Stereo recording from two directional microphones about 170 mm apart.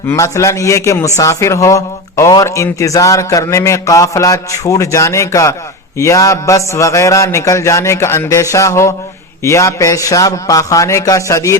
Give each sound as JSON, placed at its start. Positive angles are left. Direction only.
{"t": 0.1, "sound": "a man's voice", "side_deg": 15}